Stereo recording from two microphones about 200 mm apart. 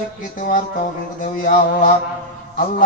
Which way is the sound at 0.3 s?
45° left (ahead or behind).